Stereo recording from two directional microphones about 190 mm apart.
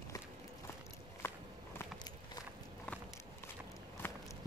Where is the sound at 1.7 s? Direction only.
20° left (ahead or behind).